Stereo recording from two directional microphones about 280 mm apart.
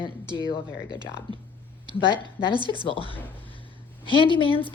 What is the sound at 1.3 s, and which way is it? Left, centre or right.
Speech, centre.